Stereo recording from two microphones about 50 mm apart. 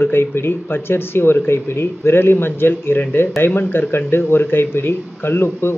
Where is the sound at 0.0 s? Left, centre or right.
Left.